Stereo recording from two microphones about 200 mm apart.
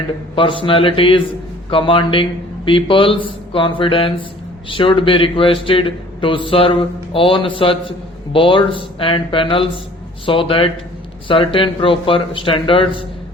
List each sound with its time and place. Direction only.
0.3 s a man's voice: 25° left (ahead or behind)